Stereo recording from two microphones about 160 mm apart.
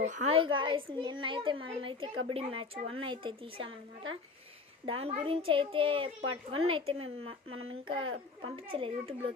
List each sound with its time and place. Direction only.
0.3 s a child's voice: 30° right (ahead or behind)
4.9 s a child's voice: 40° right (ahead or behind)